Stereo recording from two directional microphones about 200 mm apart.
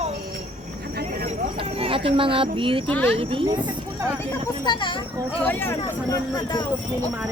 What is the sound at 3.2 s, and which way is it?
Speech, 25° right (ahead or behind).